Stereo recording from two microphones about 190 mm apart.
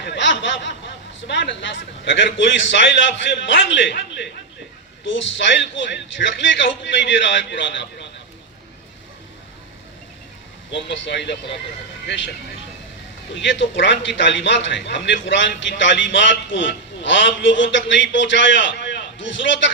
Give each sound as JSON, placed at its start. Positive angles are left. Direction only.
{"t": 0.0, "sound": "a man's voice", "side_deg": 70}
{"t": 10.8, "sound": "a man's voice", "side_deg": 70}
{"t": 13.3, "sound": "a man's voice", "side_deg": 75}